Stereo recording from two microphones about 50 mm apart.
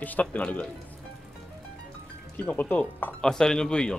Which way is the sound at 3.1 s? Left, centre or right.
Centre.